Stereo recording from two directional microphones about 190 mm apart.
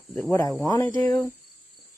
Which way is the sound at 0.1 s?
10° left (ahead or behind).